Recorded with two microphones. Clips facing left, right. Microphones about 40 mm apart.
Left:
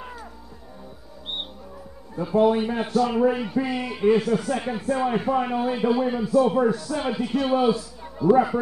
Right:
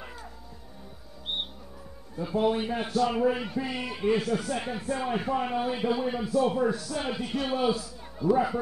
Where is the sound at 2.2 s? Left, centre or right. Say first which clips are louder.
Left 7 dB; centre.